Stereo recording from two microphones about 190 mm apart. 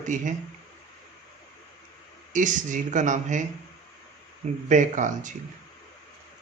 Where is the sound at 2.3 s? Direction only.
40° right (ahead or behind).